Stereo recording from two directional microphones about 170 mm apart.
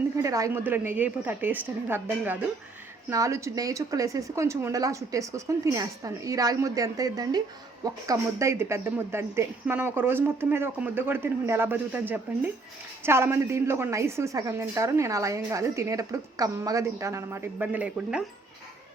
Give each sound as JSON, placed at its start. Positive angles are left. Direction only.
{"t": 0.2, "sound": "a woman's voice", "side_deg": -20}